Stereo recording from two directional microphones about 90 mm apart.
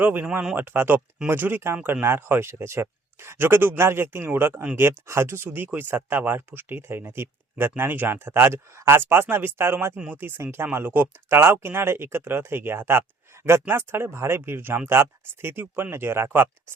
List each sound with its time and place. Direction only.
0.0 s speech: 20° right (ahead or behind)
0.3 s speech: 10° right (ahead or behind)
0.5 s speech: 25° right (ahead or behind)